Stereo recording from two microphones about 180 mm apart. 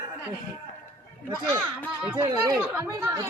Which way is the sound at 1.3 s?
25° right (ahead or behind).